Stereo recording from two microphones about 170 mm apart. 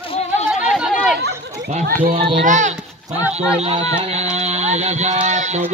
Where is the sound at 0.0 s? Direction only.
35° left (ahead or behind).